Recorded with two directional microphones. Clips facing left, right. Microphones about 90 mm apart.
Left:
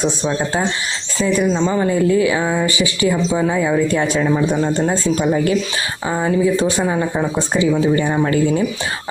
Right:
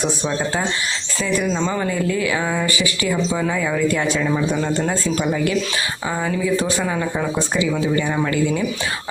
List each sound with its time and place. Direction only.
1.4 s speech: 20° left (ahead or behind); by 8.6 s 35° left (ahead or behind)